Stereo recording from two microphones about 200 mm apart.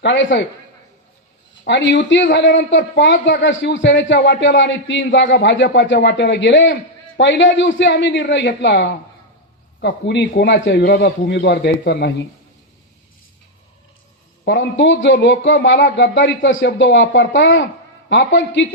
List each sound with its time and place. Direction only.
0.0 s speech: 70° left (ahead or behind)
1.6 s a man's voice: 65° left (ahead or behind)
14.4 s speech: 65° left (ahead or behind)